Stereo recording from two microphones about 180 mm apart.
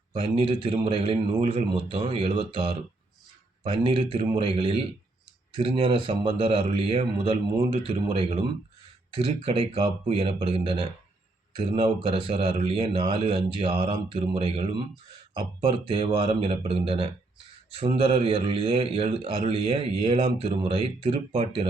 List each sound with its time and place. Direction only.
0.1 s a man's voice: 30° right (ahead or behind)
15.9 s a man's voice: 30° right (ahead or behind)